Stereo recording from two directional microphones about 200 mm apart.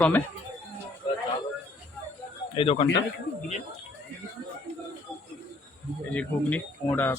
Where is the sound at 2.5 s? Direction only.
30° left (ahead or behind).